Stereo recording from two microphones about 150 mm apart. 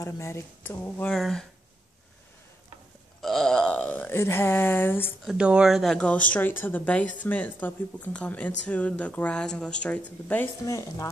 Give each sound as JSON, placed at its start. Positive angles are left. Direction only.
{"t": 0.0, "sound": "speech", "side_deg": 15}
{"t": 3.2, "sound": "burping", "side_deg": 0}
{"t": 5.2, "sound": "speech", "side_deg": -5}
{"t": 10.6, "sound": "speech", "side_deg": 20}